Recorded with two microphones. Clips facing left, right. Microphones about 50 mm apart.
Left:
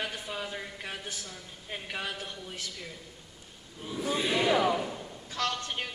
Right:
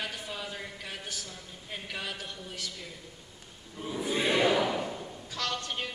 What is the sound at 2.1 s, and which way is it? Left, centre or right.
Speech, left.